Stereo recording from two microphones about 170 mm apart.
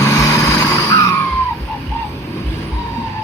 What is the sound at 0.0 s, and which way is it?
Vehicle, 15° left (ahead or behind).